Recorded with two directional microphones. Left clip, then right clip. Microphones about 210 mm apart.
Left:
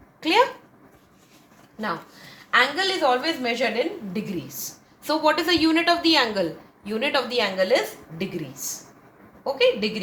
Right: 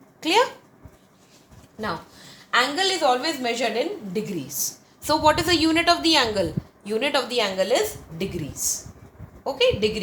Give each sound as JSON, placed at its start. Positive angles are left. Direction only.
{"t": 0.2, "sound": "speech", "side_deg": -15}
{"t": 2.5, "sound": "a woman's voice", "side_deg": -15}